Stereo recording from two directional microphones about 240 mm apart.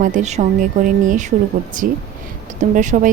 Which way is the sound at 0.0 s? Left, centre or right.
Right.